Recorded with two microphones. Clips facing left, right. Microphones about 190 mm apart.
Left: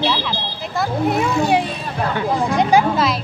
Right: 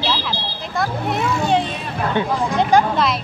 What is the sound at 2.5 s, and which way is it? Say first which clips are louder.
Speech: even; 10° left (ahead or behind).